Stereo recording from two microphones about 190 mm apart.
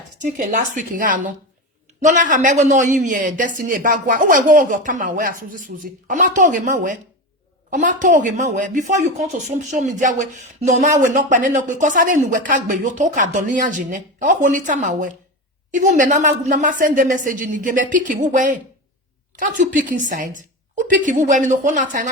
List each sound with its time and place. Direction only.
0.2 s a woman's voice: 40° right (ahead or behind)